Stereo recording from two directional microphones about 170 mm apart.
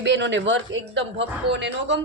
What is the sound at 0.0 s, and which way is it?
Speech, 90° right.